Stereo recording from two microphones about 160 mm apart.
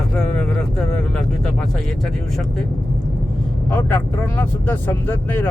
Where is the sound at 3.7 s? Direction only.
10° left (ahead or behind).